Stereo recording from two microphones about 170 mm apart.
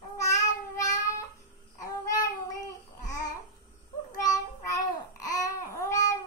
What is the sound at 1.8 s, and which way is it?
Child singing, 20° left (ahead or behind).